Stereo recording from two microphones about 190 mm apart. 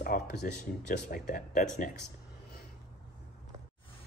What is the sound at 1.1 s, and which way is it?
Speech, 50° left (ahead or behind).